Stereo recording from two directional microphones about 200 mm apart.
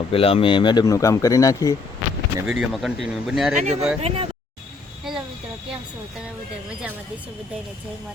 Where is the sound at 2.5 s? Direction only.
Centre (ahead or behind).